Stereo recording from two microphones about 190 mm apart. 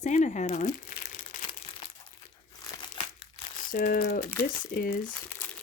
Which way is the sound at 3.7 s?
50° left (ahead or behind).